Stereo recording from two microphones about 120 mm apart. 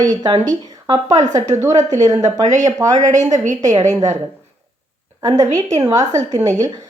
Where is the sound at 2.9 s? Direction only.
90° right.